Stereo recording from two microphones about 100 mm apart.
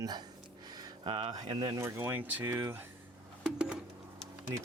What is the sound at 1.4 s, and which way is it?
Speech, 45° right (ahead or behind).